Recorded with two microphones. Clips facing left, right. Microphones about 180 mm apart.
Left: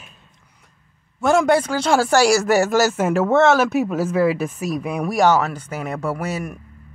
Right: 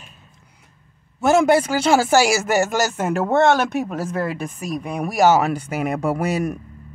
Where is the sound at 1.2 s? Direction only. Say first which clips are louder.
Right 1 dB; 5° right (ahead or behind).